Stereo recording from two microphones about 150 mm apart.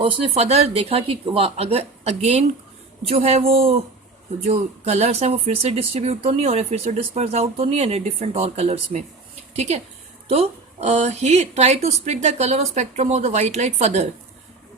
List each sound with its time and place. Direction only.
0.0 s speech: 40° right (ahead or behind)